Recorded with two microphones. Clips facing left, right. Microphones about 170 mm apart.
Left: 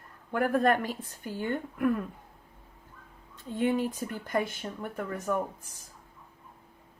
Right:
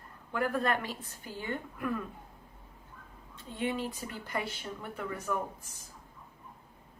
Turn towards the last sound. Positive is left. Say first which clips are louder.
# left 4 dB
turn(degrees=50)  # may be behind; listen again after turning